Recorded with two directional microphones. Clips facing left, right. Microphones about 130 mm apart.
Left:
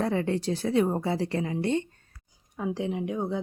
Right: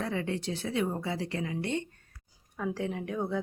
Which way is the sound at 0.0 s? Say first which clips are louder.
Left 6 dB; 40° left (ahead or behind).